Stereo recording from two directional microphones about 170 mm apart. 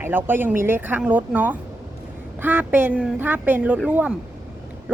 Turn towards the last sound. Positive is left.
turn(degrees=-5)  # may be behind; listen again after turning